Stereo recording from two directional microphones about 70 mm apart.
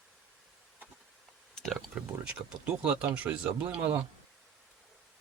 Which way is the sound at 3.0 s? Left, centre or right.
Centre.